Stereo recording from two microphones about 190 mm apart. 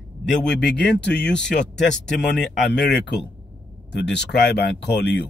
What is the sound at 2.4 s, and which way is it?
Speech, centre (ahead or behind).